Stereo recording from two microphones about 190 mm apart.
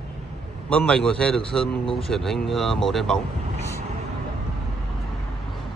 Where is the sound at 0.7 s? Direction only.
5° left (ahead or behind).